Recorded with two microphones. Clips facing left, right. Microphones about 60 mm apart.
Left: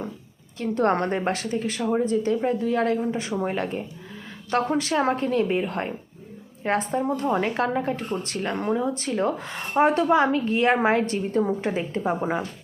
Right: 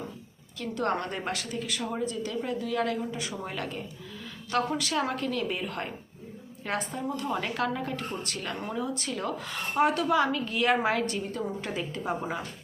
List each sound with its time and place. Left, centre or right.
0.6 s a woman's voice: left